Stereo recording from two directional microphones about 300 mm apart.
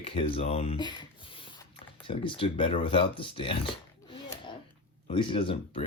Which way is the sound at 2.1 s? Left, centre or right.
Centre.